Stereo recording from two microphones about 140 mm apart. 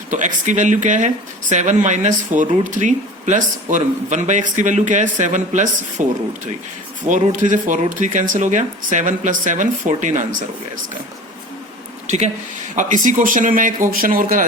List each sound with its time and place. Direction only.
0.1 s speech: 65° right (ahead or behind)
7.1 s speech: 65° right (ahead or behind)
12.0 s speech: 55° right (ahead or behind); by 13.8 s 70° right (ahead or behind)
13.9 s speech: 90° right